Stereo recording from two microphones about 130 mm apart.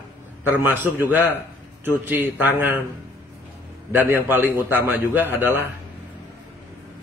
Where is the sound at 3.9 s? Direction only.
15° right (ahead or behind).